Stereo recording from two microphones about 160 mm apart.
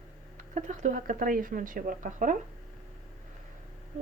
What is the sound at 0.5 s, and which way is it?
Speech, 50° right (ahead or behind).